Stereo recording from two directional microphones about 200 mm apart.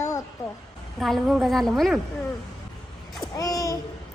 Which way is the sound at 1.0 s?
Centre (ahead or behind).